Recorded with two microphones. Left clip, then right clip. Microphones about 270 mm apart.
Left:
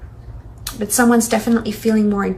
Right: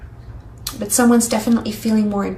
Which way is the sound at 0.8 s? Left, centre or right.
Centre.